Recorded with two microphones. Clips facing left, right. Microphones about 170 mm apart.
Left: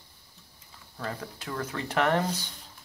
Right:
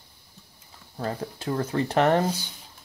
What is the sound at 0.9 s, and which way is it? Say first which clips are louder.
Speech: right 5 dB; 30° right (ahead or behind).